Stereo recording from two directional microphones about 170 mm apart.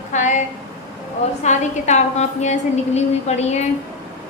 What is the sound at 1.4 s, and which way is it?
A woman's voice, 45° left (ahead or behind).